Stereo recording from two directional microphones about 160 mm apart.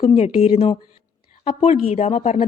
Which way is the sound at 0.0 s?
35° left (ahead or behind).